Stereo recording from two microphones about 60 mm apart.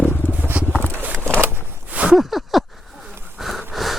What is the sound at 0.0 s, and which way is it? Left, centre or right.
Purr, left.